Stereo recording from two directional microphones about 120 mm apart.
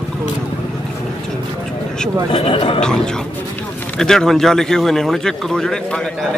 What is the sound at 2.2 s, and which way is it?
Speech, 50° left (ahead or behind).